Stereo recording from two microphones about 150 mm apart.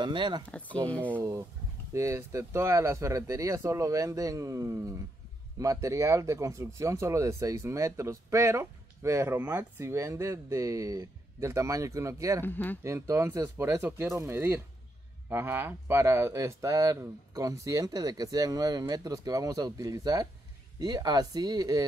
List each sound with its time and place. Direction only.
0.0 s speech: 30° right (ahead or behind)
0.5 s speech: 10° left (ahead or behind)
1.1 s speech: 20° right (ahead or behind)
12.4 s speech: 15° left (ahead or behind)
12.8 s speech: 20° right (ahead or behind)